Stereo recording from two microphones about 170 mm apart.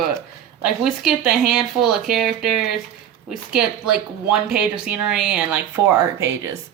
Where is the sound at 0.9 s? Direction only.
Centre (ahead or behind).